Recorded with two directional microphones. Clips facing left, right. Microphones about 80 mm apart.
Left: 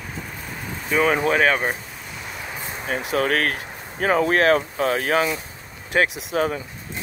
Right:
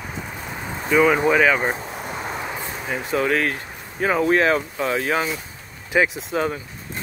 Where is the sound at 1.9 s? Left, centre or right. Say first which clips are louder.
Right 7 dB; right.